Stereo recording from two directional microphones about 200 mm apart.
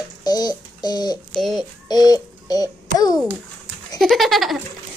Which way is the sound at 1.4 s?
Centre (ahead or behind).